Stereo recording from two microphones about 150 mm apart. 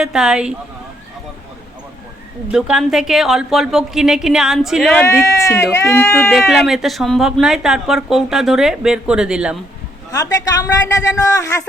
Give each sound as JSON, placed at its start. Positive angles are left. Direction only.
{"t": 0.0, "sound": "speech", "side_deg": -5}
{"t": 2.5, "sound": "speech", "side_deg": -5}
{"t": 4.9, "sound": "speech", "side_deg": 10}
{"t": 6.5, "sound": "speech", "side_deg": 0}
{"t": 10.1, "sound": "a man's voice", "side_deg": 20}